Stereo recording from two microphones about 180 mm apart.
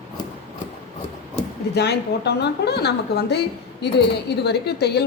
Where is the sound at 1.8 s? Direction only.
70° left (ahead or behind).